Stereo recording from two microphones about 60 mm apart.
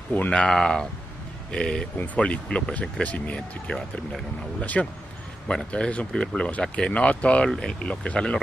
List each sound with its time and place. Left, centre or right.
0.3 s speech: centre